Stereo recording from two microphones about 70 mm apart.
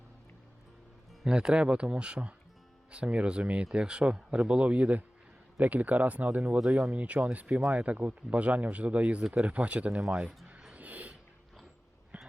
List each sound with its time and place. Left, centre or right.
1.2 s speech: centre
6.6 s speech: centre
10.0 s a sound: centre